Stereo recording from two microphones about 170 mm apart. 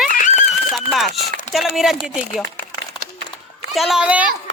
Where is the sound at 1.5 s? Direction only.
Centre (ahead or behind).